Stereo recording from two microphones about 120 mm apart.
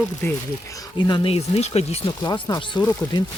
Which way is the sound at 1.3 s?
60° left (ahead or behind).